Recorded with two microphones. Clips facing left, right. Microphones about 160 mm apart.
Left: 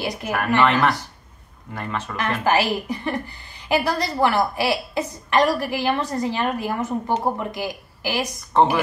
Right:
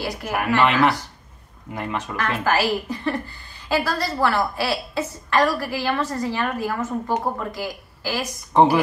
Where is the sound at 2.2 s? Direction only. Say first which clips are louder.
Left 1 dB; 20° left (ahead or behind).